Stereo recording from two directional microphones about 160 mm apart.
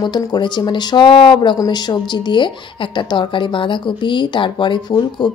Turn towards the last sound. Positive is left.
turn(degrees=30)  # may be behind; listen again after turning